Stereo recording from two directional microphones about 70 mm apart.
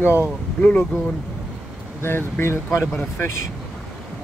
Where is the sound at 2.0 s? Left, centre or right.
Left.